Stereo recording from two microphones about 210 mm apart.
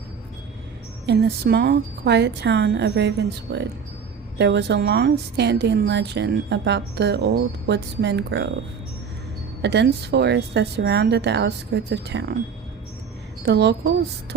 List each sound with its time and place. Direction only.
1.0 s a woman's voice: 50° right (ahead or behind)
9.6 s speech: 55° right (ahead or behind)
13.4 s speech: 55° right (ahead or behind)